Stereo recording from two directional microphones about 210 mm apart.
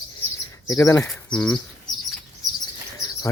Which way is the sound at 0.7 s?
15° left (ahead or behind).